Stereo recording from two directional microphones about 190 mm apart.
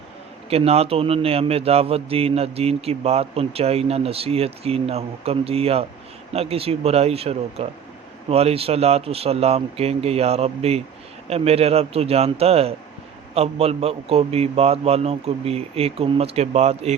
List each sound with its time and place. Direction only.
0.5 s a man's voice: 30° right (ahead or behind)